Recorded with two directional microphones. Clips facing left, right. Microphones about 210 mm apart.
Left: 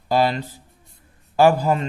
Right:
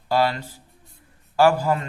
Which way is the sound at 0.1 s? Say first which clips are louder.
Left 2 dB; 20° left (ahead or behind).